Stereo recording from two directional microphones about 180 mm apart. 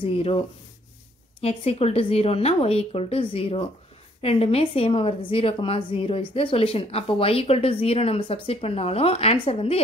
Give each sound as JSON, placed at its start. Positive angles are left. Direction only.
{"t": 0.0, "sound": "a woman's voice", "side_deg": 30}
{"t": 1.4, "sound": "a woman's voice", "side_deg": 35}